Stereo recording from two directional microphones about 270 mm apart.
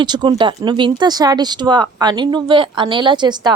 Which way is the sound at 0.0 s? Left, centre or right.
Centre.